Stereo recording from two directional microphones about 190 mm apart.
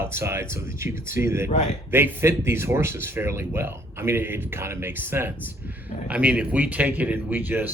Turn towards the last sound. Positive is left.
turn(degrees=-10)  # may be behind; listen again after turning